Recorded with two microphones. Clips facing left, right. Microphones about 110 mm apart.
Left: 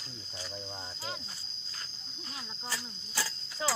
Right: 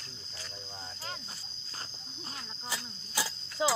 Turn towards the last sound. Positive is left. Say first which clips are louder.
# right 4 dB
turn(degrees=-15)  # may be behind; listen again after turning